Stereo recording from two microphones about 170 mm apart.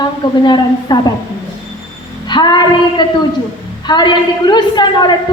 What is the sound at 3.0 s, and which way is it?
A woman's voice, 25° left (ahead or behind).